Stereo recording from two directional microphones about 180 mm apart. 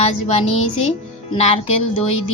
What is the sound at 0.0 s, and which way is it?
Speech, 35° left (ahead or behind).